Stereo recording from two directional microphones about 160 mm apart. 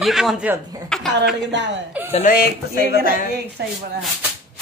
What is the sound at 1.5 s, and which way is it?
Speech, 90° right.